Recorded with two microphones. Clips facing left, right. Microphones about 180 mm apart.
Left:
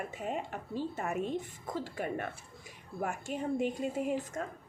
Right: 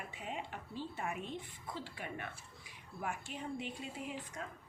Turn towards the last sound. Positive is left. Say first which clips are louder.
# left 10 dB
turn(degrees=45)  # may be behind; listen again after turning